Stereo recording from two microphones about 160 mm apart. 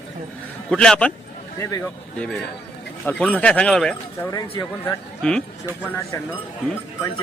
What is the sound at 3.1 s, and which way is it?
Speech, 5° left (ahead or behind).